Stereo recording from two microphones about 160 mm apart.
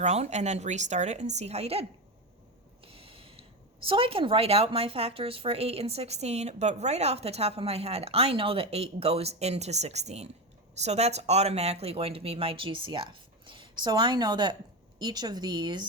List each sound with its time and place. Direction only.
0.0 s a woman's voice: 45° right (ahead or behind); by 15.9 s 25° right (ahead or behind)